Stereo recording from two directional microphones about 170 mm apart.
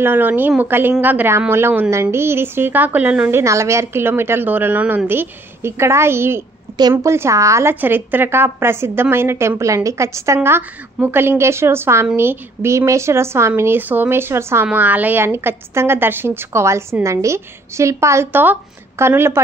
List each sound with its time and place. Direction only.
0.0 s a woman's voice: 10° right (ahead or behind)